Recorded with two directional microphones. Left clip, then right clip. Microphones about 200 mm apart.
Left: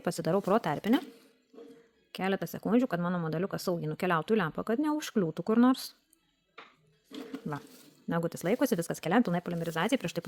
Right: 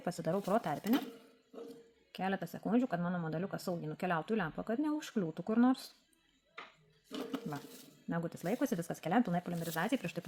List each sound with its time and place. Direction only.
0.0 s speech: 45° left (ahead or behind)
2.1 s speech: 50° left (ahead or behind)
8.0 s speech: 50° left (ahead or behind)